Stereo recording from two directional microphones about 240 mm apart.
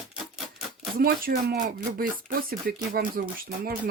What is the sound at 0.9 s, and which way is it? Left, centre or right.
Speech, right.